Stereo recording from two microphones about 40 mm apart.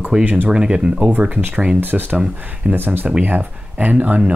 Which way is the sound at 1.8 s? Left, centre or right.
Right.